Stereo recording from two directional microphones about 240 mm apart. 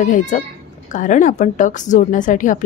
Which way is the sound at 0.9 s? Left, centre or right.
Left.